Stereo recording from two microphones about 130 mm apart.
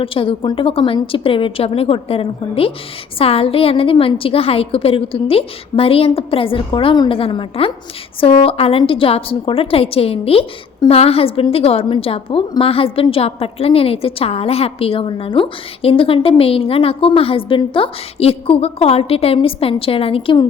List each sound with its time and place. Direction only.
0.0 s a woman's voice: 45° left (ahead or behind)